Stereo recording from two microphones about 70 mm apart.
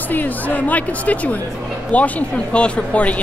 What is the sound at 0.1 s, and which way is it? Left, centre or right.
Speech, left.